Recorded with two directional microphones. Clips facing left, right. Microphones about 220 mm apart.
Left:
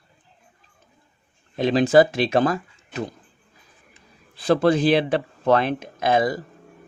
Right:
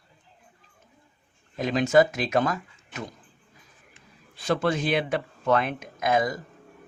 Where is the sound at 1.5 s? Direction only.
30° left (ahead or behind).